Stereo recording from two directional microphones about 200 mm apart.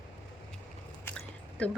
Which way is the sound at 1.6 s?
5° left (ahead or behind).